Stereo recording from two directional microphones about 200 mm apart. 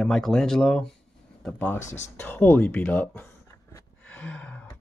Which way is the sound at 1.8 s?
35° left (ahead or behind).